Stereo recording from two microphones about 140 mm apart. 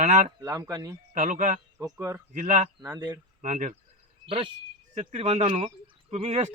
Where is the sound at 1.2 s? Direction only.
65° right (ahead or behind).